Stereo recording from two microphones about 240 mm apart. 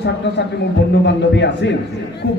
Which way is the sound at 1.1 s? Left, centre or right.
Left.